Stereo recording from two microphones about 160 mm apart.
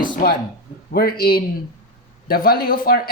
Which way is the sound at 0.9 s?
70° left (ahead or behind).